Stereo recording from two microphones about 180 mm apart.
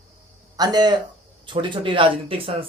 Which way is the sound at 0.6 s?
20° right (ahead or behind).